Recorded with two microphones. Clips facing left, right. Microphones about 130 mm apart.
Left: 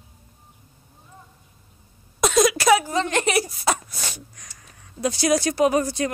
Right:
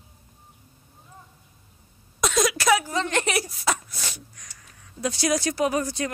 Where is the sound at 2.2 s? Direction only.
45° left (ahead or behind).